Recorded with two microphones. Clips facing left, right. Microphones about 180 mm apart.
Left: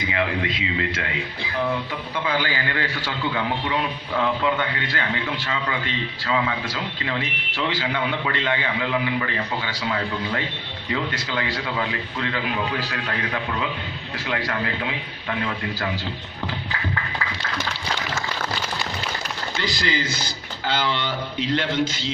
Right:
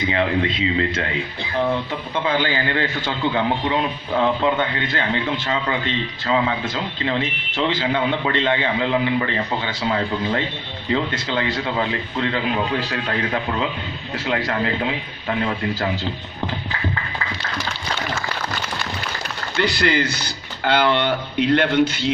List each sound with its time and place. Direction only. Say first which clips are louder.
0.1 s a man's voice: right 3 dB; 30° right (ahead or behind)
2.1 s a man's voice: right 4 dB; 25° right (ahead or behind)
19.5 s speech: right 7 dB; 60° right (ahead or behind)